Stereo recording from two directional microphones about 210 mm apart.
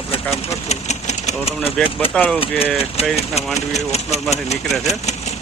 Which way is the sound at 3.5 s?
30° left (ahead or behind).